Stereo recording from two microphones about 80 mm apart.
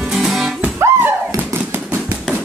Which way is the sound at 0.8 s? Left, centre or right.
Right.